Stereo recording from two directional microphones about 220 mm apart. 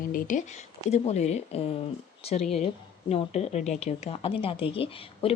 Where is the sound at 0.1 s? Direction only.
40° left (ahead or behind).